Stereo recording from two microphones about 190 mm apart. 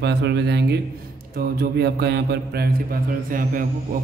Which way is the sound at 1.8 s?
60° right (ahead or behind).